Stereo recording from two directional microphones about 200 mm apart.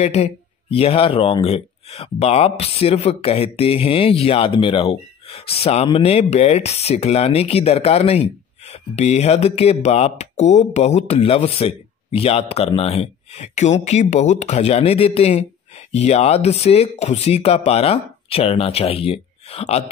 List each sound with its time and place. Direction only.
0.0 s speech: 30° left (ahead or behind)